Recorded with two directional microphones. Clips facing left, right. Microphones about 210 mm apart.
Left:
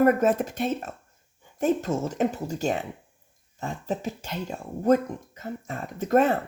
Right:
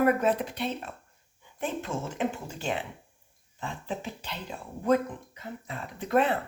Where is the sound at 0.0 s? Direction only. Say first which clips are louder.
Left 4 dB; 45° left (ahead or behind).